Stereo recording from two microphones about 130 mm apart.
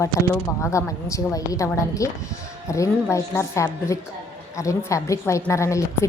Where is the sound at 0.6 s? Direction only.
20° left (ahead or behind).